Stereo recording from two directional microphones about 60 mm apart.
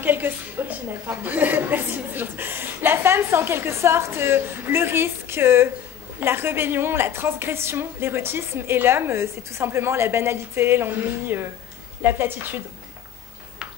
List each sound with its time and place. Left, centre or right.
0.0 s a woman's voice: right